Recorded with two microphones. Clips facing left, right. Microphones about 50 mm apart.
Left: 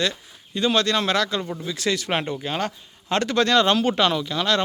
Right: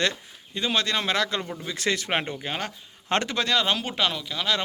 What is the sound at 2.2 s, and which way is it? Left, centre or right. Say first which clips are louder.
Speech: left 4 dB; centre.